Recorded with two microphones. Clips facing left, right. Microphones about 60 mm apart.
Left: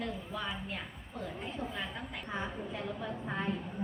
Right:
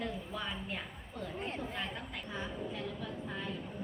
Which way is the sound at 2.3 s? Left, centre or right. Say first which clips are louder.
Left 2 dB; left.